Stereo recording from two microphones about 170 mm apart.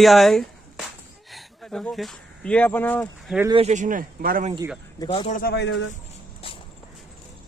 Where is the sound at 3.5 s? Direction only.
40° right (ahead or behind); by 4.5 s 55° right (ahead or behind).